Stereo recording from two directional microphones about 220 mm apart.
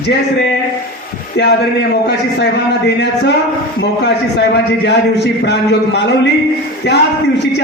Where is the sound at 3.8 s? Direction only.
50° left (ahead or behind).